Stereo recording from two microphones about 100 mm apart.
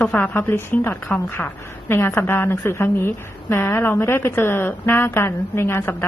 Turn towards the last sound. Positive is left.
turn(degrees=25)  # may be behind; listen again after turning